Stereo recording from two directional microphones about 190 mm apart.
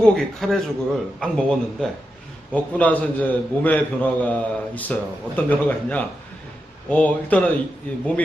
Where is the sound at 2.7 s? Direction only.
10° left (ahead or behind).